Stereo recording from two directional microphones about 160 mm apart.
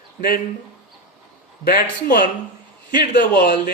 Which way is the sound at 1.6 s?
65° left (ahead or behind).